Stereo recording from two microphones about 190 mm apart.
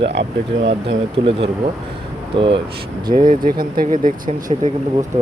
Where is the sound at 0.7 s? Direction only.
30° right (ahead or behind).